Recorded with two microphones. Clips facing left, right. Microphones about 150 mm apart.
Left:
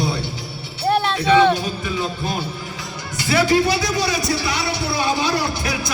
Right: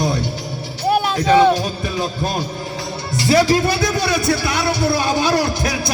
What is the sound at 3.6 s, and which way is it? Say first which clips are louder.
A man's voice: right 2 dB; 50° right (ahead or behind).